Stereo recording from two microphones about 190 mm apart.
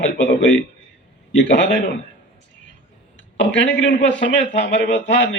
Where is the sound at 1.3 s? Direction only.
70° left (ahead or behind).